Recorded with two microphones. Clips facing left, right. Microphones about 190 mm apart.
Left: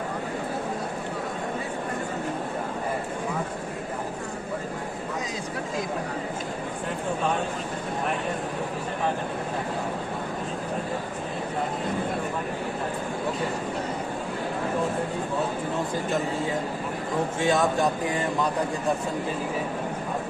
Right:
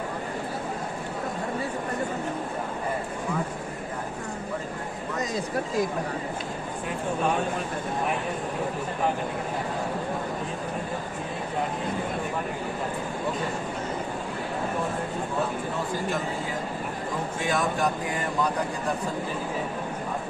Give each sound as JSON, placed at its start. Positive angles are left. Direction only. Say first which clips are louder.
{"t": 17.4, "sound": "speech", "louder": "left 4 dB", "side_deg": 25}